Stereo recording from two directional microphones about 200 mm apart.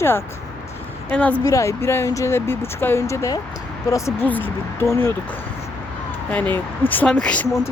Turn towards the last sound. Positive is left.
turn(degrees=5)  # may be behind; listen again after turning